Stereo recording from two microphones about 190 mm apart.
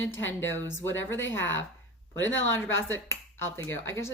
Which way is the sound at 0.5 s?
10° left (ahead or behind).